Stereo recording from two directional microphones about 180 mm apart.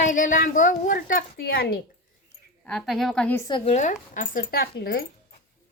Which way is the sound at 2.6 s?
Centre (ahead or behind).